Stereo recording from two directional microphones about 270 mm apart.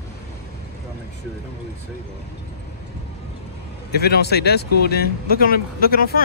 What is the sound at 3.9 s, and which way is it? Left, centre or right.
Speech, left.